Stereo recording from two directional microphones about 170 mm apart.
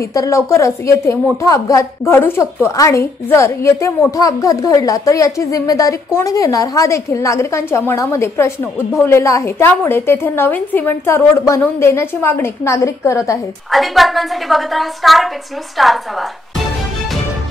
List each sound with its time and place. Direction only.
0.1 s a woman's voice: 20° left (ahead or behind)
13.7 s a woman's voice: centre (ahead or behind)